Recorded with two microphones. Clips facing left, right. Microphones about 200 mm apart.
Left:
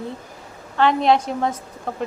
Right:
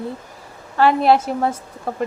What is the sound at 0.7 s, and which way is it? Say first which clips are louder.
Speech: right 2 dB; 5° right (ahead or behind).